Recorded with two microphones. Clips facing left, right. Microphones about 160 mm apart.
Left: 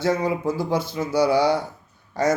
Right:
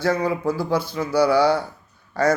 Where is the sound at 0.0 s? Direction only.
20° left (ahead or behind).